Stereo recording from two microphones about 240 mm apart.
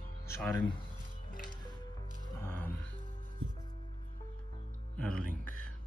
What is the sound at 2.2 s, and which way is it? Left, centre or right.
Music, centre.